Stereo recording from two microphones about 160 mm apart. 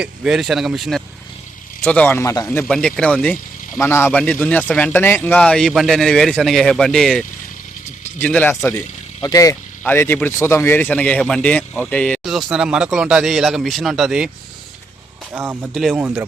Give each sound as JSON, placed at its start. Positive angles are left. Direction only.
{"t": 0.0, "sound": "speech", "side_deg": -5}
{"t": 2.6, "sound": "speech", "side_deg": 5}
{"t": 9.2, "sound": "speech", "side_deg": 20}
{"t": 15.3, "sound": "speech", "side_deg": -15}
{"t": 15.7, "sound": "speech", "side_deg": 0}